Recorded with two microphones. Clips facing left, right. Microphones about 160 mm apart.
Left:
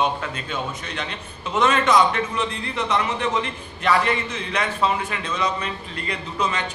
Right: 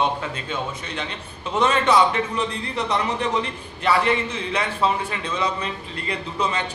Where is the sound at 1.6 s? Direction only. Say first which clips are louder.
Even; 35° right (ahead or behind).